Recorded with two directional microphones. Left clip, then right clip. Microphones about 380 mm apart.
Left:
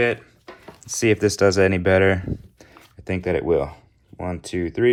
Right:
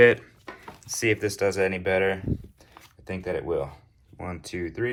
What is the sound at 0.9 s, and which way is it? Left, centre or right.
Speech, centre.